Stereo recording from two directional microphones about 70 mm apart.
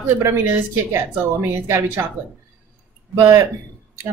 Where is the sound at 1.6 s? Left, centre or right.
Right.